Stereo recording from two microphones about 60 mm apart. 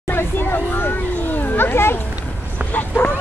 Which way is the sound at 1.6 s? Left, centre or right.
Left.